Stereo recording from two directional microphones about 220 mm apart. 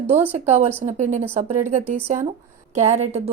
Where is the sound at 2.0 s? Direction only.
10° right (ahead or behind).